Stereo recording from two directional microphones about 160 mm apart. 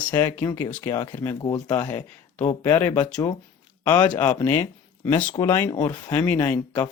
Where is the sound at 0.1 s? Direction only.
15° left (ahead or behind).